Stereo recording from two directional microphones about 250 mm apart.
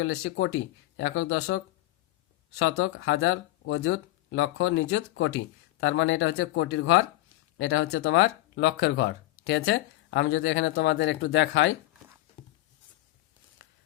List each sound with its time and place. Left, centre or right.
0.0 s speech: left